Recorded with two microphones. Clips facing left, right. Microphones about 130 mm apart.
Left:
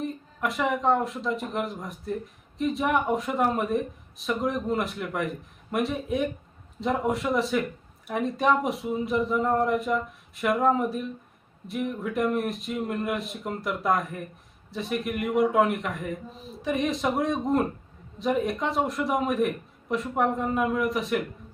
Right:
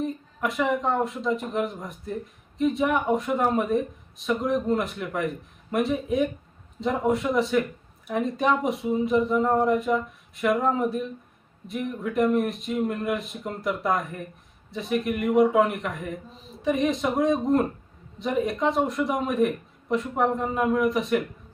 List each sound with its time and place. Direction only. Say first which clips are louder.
0.0 s speech: right 2 dB; centre (ahead or behind)